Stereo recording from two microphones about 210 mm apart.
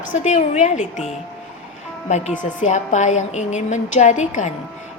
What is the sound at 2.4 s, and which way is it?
A woman's voice, 35° left (ahead or behind).